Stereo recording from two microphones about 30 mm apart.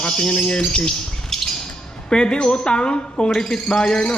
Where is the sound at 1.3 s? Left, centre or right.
Centre.